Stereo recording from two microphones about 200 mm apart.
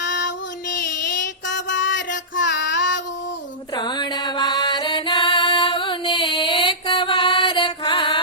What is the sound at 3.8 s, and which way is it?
Music, 20° left (ahead or behind).